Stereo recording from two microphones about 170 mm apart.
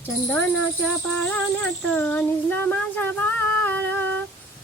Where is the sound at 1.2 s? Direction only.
10° left (ahead or behind).